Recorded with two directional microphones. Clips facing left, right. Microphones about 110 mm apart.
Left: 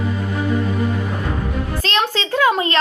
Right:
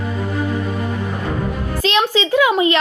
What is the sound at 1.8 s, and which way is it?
Speech, 15° right (ahead or behind).